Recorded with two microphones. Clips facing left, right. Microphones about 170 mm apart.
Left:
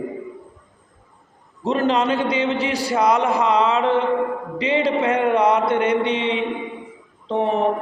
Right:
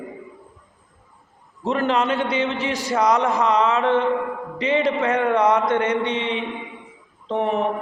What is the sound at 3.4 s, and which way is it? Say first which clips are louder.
A man's voice: left 1 dB; 30° left (ahead or behind).